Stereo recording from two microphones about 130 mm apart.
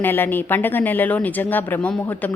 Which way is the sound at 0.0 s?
15° left (ahead or behind).